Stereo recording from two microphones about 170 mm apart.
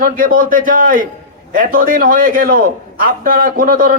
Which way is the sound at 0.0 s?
55° right (ahead or behind).